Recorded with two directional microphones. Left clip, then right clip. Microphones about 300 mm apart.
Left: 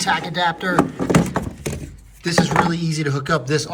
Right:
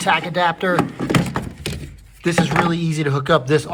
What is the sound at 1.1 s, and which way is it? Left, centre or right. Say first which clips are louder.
Horse: left 2 dB; centre.